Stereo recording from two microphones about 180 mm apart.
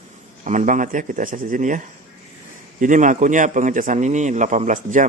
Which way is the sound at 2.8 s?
45° right (ahead or behind).